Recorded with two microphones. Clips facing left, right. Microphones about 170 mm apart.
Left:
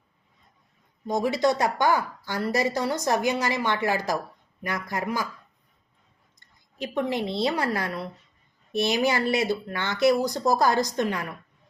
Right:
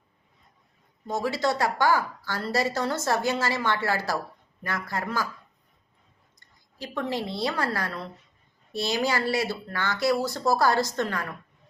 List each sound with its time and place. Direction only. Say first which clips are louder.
1.0 s a woman's voice: left 3 dB; 15° left (ahead or behind)
6.7 s speech: left 3 dB; 20° left (ahead or behind)